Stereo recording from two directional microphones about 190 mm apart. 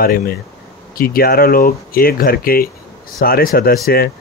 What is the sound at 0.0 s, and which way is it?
Speech, 50° left (ahead or behind).